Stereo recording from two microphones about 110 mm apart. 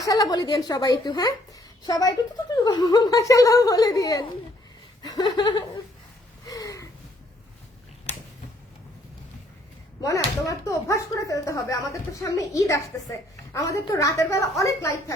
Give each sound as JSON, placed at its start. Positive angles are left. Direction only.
{"t": 0.0, "sound": "speech", "side_deg": 35}
{"t": 6.5, "sound": "gasp", "side_deg": 30}
{"t": 10.0, "sound": "a woman's voice", "side_deg": 30}